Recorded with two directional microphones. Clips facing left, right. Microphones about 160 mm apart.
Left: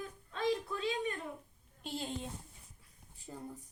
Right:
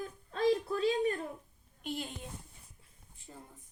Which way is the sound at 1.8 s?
30° left (ahead or behind).